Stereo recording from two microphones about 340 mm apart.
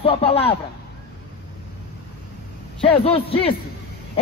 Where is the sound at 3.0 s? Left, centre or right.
Centre.